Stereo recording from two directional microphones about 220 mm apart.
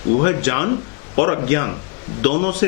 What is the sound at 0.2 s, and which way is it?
A man's voice, 15° left (ahead or behind).